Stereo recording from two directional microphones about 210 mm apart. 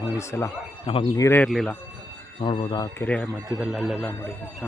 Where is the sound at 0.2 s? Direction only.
10° left (ahead or behind).